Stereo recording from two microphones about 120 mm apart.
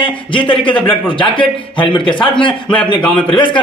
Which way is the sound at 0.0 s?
45° left (ahead or behind).